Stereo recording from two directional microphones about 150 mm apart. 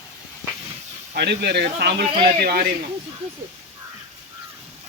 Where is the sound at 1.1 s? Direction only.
90° right.